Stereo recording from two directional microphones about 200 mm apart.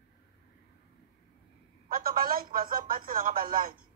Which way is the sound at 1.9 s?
45° right (ahead or behind).